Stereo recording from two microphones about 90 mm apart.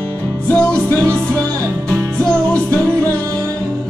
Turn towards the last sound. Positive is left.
turn(degrees=15)  # may be behind; listen again after turning